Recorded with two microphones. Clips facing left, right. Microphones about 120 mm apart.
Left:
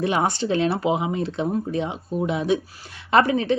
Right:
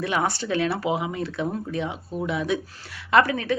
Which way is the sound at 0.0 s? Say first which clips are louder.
Left 3 dB; 25° left (ahead or behind).